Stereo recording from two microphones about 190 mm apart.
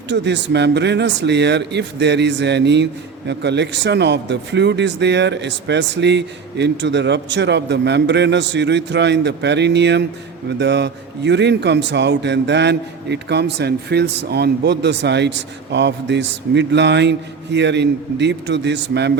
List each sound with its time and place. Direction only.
0.1 s speech: 65° right (ahead or behind)